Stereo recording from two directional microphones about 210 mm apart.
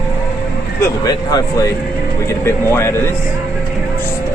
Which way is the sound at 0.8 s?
15° left (ahead or behind).